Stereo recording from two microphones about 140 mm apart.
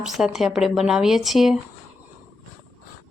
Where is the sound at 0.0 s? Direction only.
5° right (ahead or behind).